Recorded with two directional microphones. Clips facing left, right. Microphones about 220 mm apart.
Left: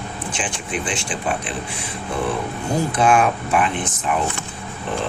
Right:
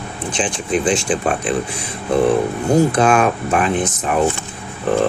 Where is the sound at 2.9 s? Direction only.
45° right (ahead or behind).